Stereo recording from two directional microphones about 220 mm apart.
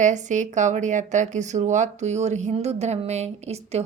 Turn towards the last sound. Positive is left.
turn(degrees=-30)  # may be behind; listen again after turning